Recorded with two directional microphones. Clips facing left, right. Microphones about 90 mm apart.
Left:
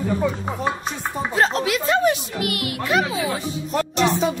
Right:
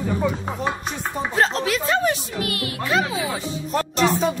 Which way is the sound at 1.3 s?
35° left (ahead or behind).